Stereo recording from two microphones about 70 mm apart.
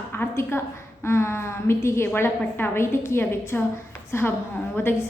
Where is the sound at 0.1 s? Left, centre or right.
Left.